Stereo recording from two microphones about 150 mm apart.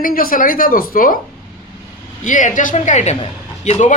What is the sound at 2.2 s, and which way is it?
Speech, 60° left (ahead or behind).